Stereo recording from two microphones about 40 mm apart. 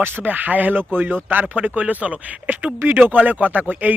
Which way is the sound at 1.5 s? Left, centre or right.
Right.